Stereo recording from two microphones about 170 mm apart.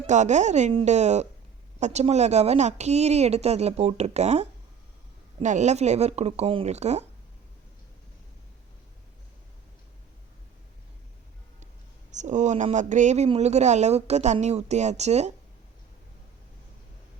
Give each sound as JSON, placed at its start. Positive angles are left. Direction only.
{"t": 0.1, "sound": "speech", "side_deg": -45}
{"t": 12.1, "sound": "speech", "side_deg": -45}